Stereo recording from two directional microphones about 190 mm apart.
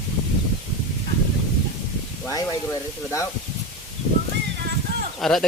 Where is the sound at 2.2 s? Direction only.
20° left (ahead or behind).